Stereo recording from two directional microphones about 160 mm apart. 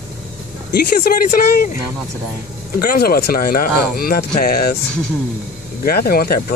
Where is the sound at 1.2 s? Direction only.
60° left (ahead or behind).